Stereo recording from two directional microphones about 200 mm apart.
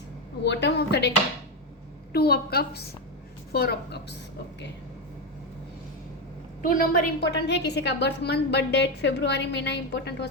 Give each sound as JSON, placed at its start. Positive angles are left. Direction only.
{"t": 0.4, "sound": "a woman's voice", "side_deg": 60}
{"t": 2.1, "sound": "a woman's voice", "side_deg": 50}
{"t": 6.6, "sound": "a woman's voice", "side_deg": 45}